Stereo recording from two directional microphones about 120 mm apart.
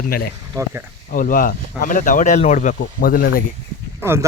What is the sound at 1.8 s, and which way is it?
Speech, 90° left.